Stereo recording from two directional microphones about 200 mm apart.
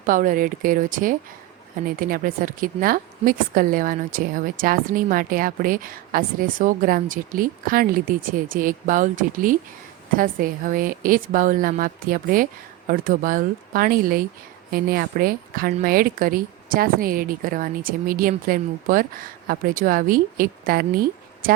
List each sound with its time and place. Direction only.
0.0 s a woman's voice: 40° right (ahead or behind)